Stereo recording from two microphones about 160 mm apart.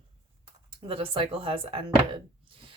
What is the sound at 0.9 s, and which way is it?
Speech, 35° right (ahead or behind).